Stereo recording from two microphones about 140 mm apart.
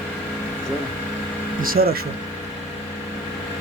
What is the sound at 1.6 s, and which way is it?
Speech, 90° right.